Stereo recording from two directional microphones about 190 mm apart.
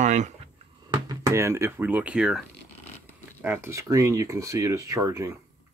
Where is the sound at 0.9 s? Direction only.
20° right (ahead or behind).